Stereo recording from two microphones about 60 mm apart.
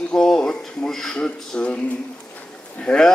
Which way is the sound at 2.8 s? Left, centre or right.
Centre.